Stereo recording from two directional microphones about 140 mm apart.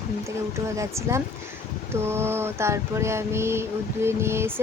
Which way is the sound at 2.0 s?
20° right (ahead or behind).